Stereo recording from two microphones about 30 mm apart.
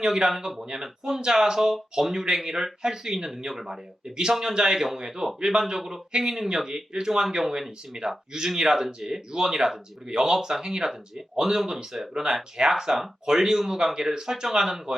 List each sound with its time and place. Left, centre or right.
0.0 s speech: right
0.3 s speech: centre